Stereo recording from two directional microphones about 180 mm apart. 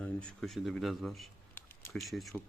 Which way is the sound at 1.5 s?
15° left (ahead or behind).